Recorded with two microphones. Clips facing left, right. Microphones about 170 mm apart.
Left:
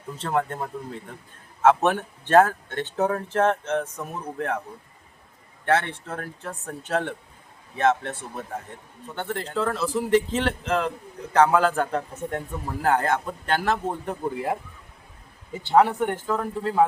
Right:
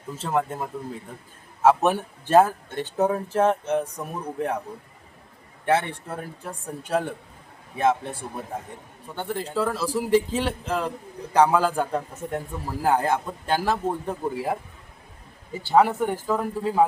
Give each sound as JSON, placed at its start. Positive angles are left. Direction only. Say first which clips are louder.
{"t": 0.2, "sound": "a man's voice", "louder": "even", "side_deg": -5}
{"t": 5.6, "sound": "a man's voice", "louder": "even", "side_deg": -15}
{"t": 15.7, "sound": "a man's voice", "louder": "even", "side_deg": -5}